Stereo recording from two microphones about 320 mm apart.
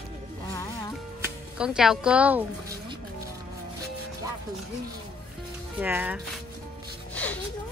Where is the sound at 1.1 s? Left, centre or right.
Centre.